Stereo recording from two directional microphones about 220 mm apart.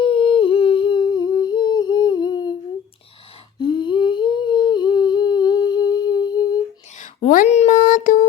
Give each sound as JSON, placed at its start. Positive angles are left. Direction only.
{"t": 0.0, "sound": "humming", "side_deg": 25}
{"t": 3.6, "sound": "humming", "side_deg": 20}
{"t": 7.0, "sound": "a sound", "side_deg": 35}